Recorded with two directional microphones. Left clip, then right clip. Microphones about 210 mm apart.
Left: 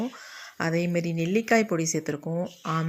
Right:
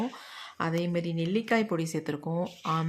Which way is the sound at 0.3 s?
10° left (ahead or behind).